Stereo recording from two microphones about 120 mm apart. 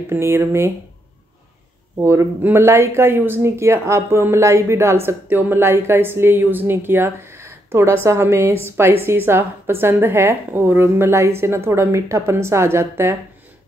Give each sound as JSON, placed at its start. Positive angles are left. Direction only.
{"t": 0.1, "sound": "speech", "side_deg": -20}
{"t": 2.0, "sound": "speech", "side_deg": -25}